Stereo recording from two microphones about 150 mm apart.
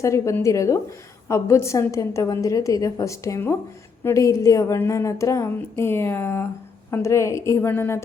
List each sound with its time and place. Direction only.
0.0 s a woman's voice: 20° left (ahead or behind)